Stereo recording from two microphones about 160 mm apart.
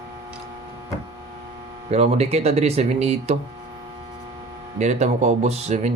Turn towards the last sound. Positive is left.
turn(degrees=-45)  # may be behind; listen again after turning